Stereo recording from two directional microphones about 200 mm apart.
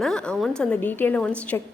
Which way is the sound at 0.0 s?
5° left (ahead or behind).